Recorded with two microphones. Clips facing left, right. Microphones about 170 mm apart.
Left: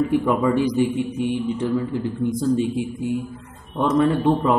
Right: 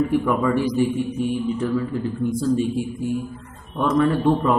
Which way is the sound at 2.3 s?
20° left (ahead or behind).